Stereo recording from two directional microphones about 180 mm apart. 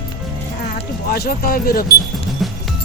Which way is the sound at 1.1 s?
55° left (ahead or behind).